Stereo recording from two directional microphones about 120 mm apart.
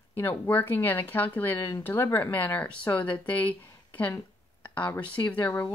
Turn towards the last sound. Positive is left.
turn(degrees=10)  # may be behind; listen again after turning